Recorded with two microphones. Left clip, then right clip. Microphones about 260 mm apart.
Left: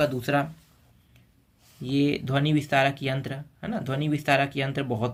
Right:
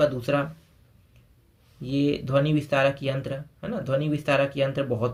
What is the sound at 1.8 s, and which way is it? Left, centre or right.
Speech, centre.